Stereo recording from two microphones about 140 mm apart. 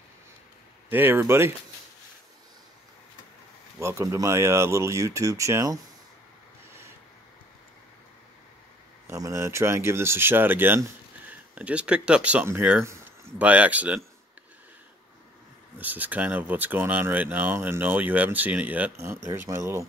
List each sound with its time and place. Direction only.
0.8 s speech: 15° right (ahead or behind)
3.8 s speech: 20° right (ahead or behind)
9.0 s speech: 20° right (ahead or behind)
15.8 s speech: 10° right (ahead or behind)